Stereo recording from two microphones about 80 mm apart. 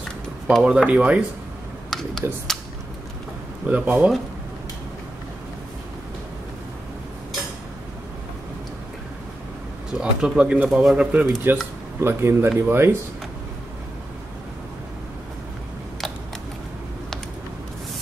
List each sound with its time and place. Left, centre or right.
0.6 s speech: centre
1.9 s a sound: centre
3.6 s speech: right
9.9 s speech: centre
10.7 s speech: centre
11.0 s speech: centre
12.0 s speech: right